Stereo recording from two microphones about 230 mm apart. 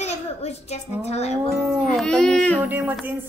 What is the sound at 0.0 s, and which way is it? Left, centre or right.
A child's voice, left.